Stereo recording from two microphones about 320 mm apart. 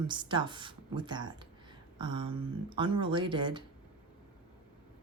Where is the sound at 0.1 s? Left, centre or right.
Centre.